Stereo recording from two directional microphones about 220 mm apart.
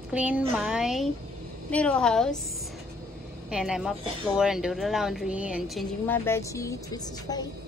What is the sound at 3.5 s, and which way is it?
A woman's voice, centre (ahead or behind).